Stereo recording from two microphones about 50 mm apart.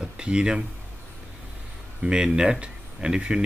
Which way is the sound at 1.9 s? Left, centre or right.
Centre.